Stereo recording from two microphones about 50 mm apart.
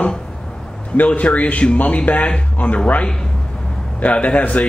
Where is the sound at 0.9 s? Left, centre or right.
Left.